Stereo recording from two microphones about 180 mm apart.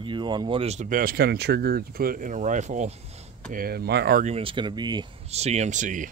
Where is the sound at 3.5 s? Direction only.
60° right (ahead or behind).